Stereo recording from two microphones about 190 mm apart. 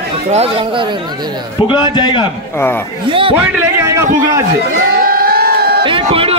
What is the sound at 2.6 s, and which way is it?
Speech, 10° left (ahead or behind).